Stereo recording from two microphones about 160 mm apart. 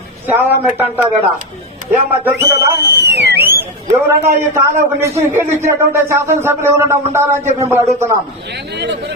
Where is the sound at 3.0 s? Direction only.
90° right.